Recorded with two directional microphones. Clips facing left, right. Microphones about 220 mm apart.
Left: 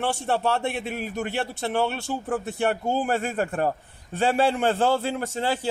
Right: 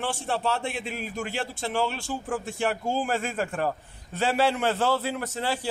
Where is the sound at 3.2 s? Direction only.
45° left (ahead or behind).